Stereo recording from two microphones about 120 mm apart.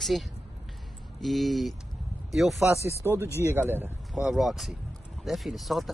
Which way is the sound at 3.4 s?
20° right (ahead or behind).